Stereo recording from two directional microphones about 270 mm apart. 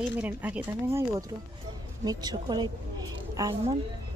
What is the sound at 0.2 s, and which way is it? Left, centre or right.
Speech, centre.